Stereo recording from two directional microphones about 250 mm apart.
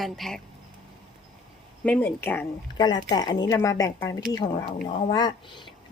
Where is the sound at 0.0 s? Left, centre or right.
Centre.